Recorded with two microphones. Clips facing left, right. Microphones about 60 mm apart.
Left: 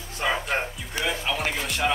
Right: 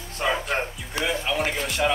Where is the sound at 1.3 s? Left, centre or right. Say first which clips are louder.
Right 2 dB; centre.